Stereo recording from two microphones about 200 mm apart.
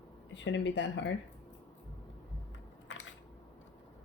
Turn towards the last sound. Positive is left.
turn(degrees=65)  # may be behind; listen again after turning